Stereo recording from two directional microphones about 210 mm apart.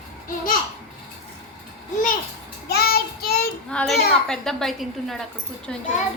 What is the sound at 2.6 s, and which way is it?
Child singing, 50° left (ahead or behind).